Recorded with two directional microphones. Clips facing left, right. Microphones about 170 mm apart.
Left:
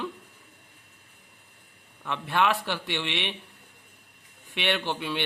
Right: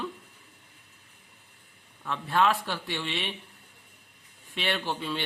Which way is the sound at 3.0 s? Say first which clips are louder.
Left 2 dB; 75° left (ahead or behind).